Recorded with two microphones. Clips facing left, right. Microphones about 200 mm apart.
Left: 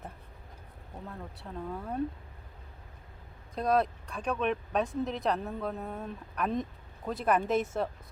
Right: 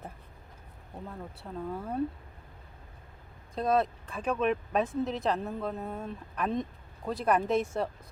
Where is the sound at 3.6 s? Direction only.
Centre (ahead or behind).